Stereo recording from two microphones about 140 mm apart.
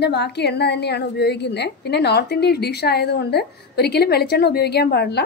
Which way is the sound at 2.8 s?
90° left.